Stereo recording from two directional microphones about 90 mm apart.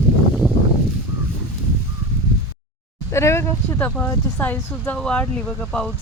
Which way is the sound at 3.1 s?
30° left (ahead or behind).